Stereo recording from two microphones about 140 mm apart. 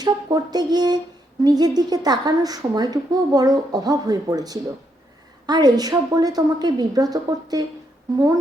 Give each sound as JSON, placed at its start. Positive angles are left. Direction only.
{"t": 0.0, "sound": "a woman's voice", "side_deg": -30}